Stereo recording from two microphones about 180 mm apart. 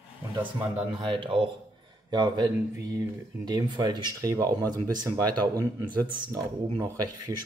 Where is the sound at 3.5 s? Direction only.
20° right (ahead or behind).